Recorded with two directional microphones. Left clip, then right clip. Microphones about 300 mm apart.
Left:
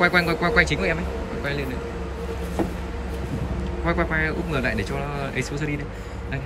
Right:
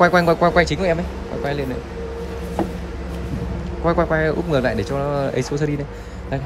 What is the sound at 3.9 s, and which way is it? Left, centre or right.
Speech, centre.